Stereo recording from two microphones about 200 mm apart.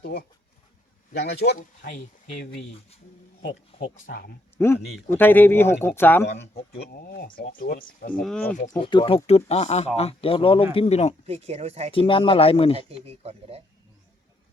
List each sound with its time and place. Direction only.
0.0 s speech: 55° left (ahead or behind)
1.5 s speech: 40° left (ahead or behind)
4.0 s speech: 50° left (ahead or behind)
4.5 s speech: 10° left (ahead or behind)
6.2 s speech: 60° left (ahead or behind)
8.2 s speech: 5° left (ahead or behind)
8.7 s speech: 20° left (ahead or behind)
11.3 s speech: 30° right (ahead or behind)
11.9 s speech: 25° left (ahead or behind)
12.9 s speech: 30° right (ahead or behind)